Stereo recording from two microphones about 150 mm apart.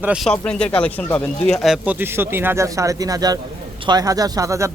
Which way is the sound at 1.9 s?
15° right (ahead or behind).